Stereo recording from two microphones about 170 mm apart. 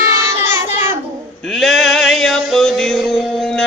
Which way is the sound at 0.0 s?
15° right (ahead or behind).